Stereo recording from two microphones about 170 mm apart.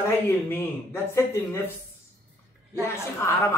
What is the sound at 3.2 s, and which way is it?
Speech, 15° left (ahead or behind).